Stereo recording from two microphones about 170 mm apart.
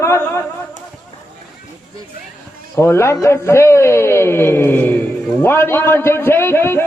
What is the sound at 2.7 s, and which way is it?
A man's voice, 15° left (ahead or behind).